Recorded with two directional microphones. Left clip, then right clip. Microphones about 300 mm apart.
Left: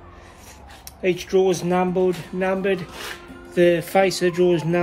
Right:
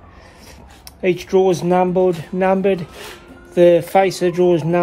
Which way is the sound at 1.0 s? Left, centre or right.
Centre.